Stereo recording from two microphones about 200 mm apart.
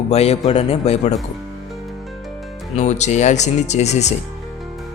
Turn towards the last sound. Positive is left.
turn(degrees=35)  # may be behind; listen again after turning